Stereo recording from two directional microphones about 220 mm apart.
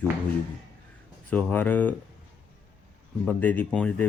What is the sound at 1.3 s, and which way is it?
Speech, 5° left (ahead or behind).